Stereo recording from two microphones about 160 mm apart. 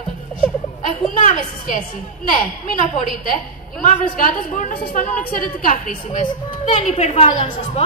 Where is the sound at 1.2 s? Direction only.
50° left (ahead or behind).